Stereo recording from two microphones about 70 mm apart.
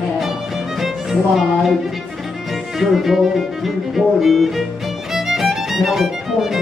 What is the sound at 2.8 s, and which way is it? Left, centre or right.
Music, centre.